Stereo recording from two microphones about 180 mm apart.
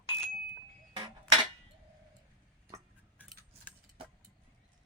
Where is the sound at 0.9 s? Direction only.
25° right (ahead or behind).